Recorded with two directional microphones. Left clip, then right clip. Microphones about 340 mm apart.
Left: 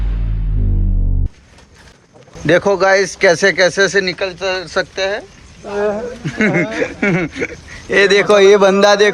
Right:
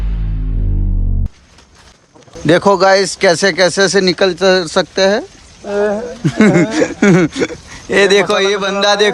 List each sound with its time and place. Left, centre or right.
2.5 s speech: centre
5.7 s speech: right
6.2 s speech: centre